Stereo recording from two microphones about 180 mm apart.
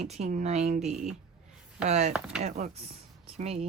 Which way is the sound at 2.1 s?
5° right (ahead or behind).